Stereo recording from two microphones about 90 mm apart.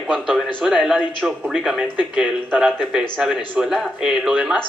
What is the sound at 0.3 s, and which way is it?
A man's voice, 5° right (ahead or behind).